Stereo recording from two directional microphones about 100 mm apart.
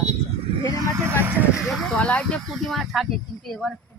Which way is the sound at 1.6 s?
Centre (ahead or behind).